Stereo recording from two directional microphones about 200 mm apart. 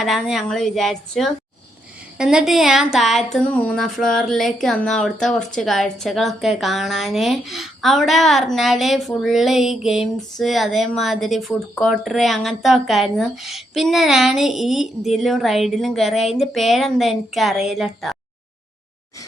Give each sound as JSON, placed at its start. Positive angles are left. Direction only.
{"t": 0.0, "sound": "speech", "side_deg": 0}